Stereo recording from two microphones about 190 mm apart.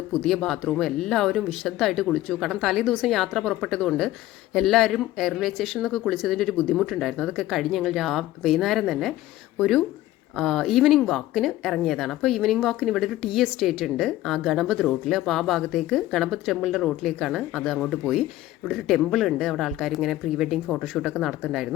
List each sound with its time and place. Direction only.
0.2 s speech: centre (ahead or behind)